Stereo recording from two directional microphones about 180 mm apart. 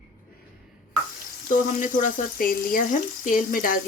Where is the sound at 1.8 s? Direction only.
50° left (ahead or behind).